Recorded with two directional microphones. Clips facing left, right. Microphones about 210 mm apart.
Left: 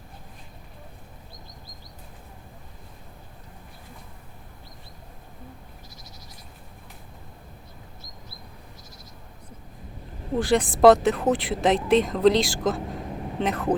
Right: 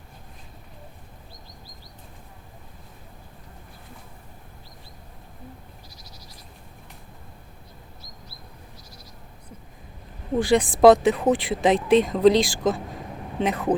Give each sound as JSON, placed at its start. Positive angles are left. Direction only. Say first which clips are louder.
{"t": 10.3, "sound": "speech", "louder": "right 2 dB", "side_deg": 0}